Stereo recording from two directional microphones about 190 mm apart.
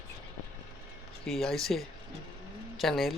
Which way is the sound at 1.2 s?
Centre (ahead or behind).